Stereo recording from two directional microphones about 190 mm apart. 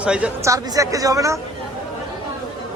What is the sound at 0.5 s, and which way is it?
Speech, 15° right (ahead or behind).